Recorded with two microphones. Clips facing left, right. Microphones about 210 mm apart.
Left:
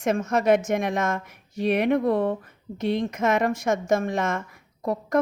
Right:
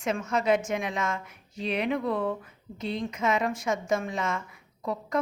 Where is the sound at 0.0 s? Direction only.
45° left (ahead or behind).